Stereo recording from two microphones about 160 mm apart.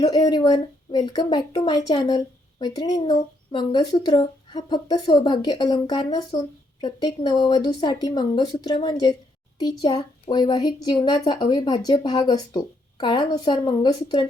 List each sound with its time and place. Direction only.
0.0 s a woman's voice: 25° left (ahead or behind)